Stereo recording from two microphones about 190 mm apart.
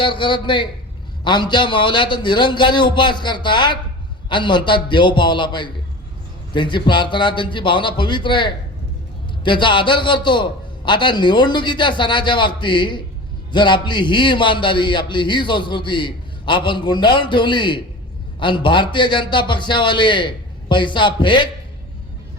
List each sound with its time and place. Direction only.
0.0 s a man's voice: 25° left (ahead or behind)